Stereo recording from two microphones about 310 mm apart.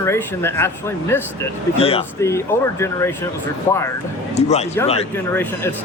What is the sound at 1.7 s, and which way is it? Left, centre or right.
A man's voice, centre.